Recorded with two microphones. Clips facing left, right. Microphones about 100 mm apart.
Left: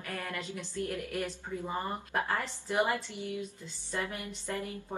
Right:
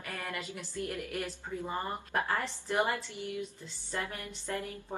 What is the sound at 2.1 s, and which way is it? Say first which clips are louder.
Speech: right 1 dB; centre (ahead or behind).